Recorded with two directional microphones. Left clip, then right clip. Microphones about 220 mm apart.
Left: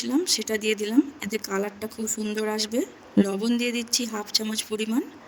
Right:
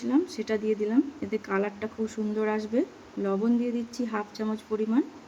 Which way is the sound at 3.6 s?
55° left (ahead or behind).